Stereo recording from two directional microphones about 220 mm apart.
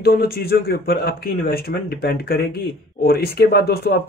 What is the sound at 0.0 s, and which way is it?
Speech, 45° left (ahead or behind).